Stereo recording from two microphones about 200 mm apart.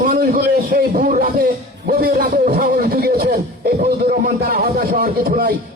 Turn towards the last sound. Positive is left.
turn(degrees=-45)  # may be behind; listen again after turning